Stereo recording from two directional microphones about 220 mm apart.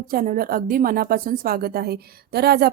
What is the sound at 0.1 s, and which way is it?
A woman's voice, 40° right (ahead or behind).